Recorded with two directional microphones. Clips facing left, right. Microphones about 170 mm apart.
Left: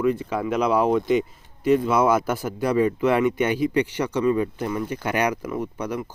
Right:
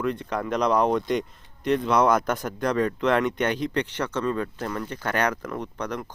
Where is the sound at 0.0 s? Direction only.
5° left (ahead or behind).